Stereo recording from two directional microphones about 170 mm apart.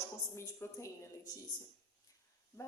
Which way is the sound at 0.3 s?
15° left (ahead or behind).